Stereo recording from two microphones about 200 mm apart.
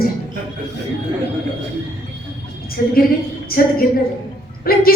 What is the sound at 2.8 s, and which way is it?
A woman's voice, 45° left (ahead or behind).